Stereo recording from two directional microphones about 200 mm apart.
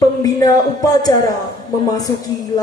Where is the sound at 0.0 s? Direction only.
20° left (ahead or behind).